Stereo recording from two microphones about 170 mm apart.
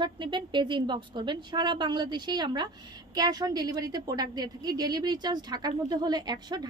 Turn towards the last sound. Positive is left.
turn(degrees=-25)  # may be behind; listen again after turning